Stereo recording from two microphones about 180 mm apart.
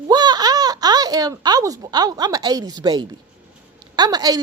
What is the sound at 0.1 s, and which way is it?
A woman's voice, 20° right (ahead or behind).